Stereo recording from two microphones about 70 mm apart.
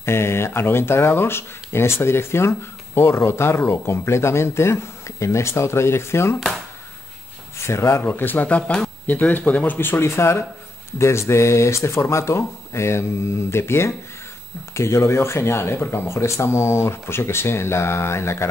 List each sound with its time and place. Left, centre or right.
0.0 s speech: left
7.5 s speech: left
8.0 s speech: left
10.0 s speech: left